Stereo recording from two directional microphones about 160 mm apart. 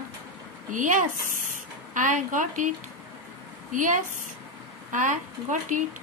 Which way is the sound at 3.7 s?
55° right (ahead or behind).